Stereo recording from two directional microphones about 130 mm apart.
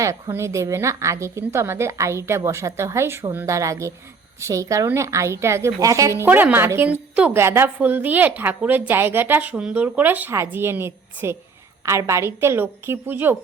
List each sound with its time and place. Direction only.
0.0 s a woman's voice: 20° right (ahead or behind)